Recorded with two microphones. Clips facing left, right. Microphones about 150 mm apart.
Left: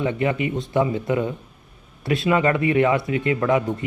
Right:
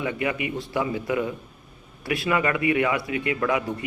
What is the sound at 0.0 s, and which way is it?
Speech, 25° left (ahead or behind).